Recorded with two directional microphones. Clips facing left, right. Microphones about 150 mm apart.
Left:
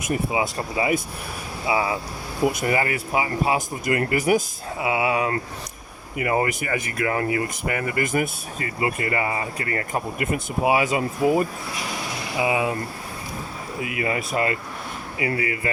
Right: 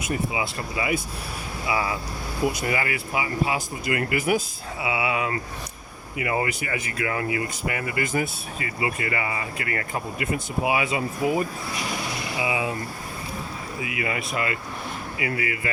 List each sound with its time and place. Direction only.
0.3 s speech: 35° left (ahead or behind)
1.6 s speech: 25° left (ahead or behind)
2.6 s speech: 40° left (ahead or behind)
12.4 s speech: 50° left (ahead or behind)
13.8 s speech: 40° left (ahead or behind)